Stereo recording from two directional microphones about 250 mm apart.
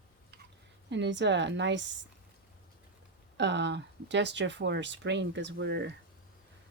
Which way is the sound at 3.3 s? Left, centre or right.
Right.